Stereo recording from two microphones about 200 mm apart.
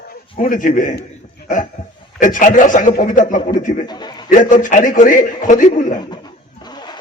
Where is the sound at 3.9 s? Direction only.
20° left (ahead or behind).